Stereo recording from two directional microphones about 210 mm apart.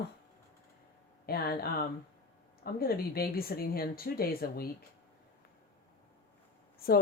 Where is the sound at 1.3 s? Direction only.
45° left (ahead or behind).